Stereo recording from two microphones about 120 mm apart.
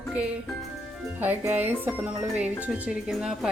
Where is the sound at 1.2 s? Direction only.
15° right (ahead or behind).